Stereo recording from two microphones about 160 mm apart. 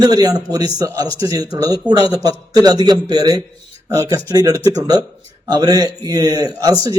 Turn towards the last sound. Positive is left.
turn(degrees=-25)  # may be behind; listen again after turning